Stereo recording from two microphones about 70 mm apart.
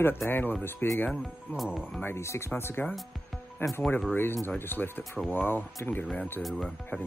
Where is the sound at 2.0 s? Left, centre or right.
Left.